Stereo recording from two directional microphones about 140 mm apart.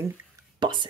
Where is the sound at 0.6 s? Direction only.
35° right (ahead or behind).